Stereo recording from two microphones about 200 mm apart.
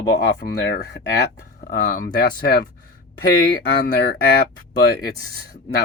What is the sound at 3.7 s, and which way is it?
Speech, 60° left (ahead or behind).